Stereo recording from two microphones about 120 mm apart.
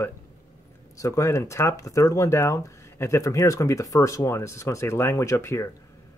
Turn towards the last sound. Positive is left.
turn(degrees=25)  # may be behind; listen again after turning